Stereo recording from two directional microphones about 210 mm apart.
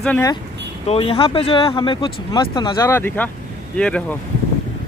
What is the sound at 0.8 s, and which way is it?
Speech, 30° left (ahead or behind).